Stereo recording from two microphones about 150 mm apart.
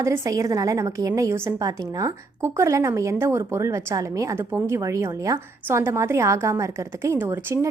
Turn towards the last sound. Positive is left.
turn(degrees=-15)  # may be behind; listen again after turning